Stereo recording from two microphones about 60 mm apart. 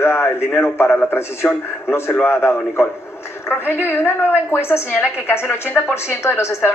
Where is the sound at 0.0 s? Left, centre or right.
Left.